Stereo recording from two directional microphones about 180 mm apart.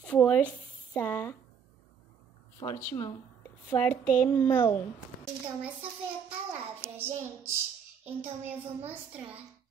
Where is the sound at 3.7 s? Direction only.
15° left (ahead or behind).